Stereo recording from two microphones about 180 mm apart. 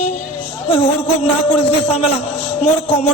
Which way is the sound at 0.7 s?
35° left (ahead or behind).